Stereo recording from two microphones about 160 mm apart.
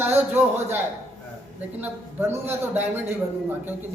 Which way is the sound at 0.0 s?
15° right (ahead or behind).